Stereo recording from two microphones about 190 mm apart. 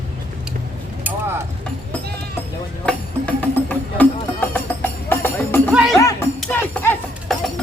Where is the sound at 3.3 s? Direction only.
5° left (ahead or behind).